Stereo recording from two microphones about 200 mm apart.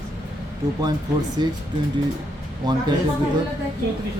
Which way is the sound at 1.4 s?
20° right (ahead or behind).